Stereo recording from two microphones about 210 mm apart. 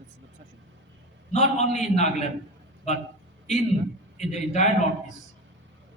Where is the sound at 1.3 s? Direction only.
35° left (ahead or behind).